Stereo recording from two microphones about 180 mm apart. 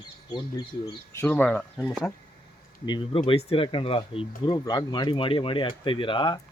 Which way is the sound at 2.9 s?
30° left (ahead or behind).